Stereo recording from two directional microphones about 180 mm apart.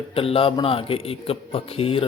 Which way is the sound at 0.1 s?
30° left (ahead or behind).